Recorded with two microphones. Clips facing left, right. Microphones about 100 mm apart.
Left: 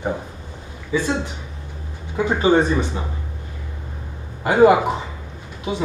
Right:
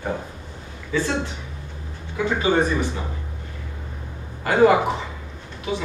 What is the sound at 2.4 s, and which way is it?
Speech, 25° left (ahead or behind).